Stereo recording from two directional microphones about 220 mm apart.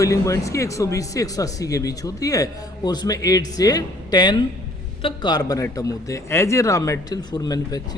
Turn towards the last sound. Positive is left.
turn(degrees=15)  # may be behind; listen again after turning